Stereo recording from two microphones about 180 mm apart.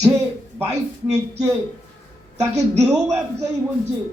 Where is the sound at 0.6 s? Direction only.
20° right (ahead or behind).